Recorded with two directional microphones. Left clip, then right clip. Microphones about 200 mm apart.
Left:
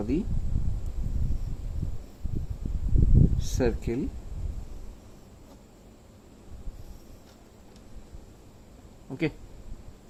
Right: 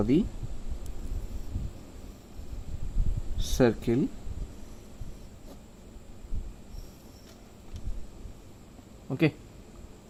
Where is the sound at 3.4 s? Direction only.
35° right (ahead or behind).